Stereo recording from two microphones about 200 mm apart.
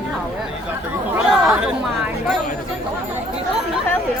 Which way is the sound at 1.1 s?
5° right (ahead or behind).